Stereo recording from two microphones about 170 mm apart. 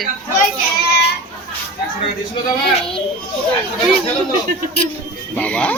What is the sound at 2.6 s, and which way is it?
Speech, 5° left (ahead or behind).